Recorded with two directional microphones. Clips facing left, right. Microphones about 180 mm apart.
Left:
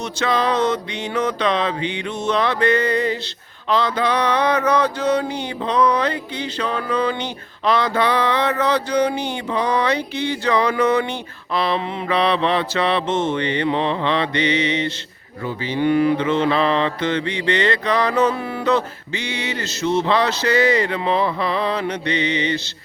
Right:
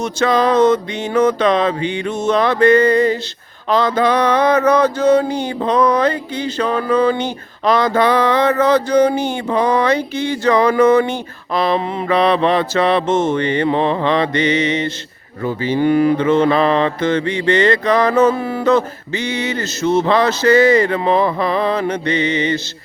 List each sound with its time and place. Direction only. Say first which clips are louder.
0.0 s mantra: right 5 dB; 45° right (ahead or behind)